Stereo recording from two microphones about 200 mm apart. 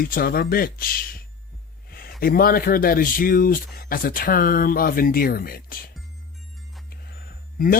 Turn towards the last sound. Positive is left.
turn(degrees=45)  # may be behind; listen again after turning